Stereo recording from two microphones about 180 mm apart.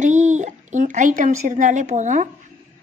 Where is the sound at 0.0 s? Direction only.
40° right (ahead or behind).